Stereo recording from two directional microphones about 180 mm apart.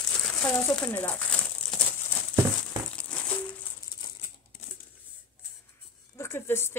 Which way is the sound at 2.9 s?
5° left (ahead or behind).